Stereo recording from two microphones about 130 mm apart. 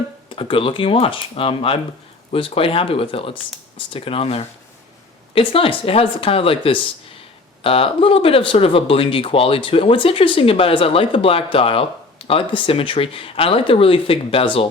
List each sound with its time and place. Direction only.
0.3 s speech: 45° left (ahead or behind)